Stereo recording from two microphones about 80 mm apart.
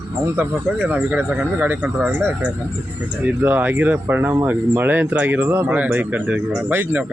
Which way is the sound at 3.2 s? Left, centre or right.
Right.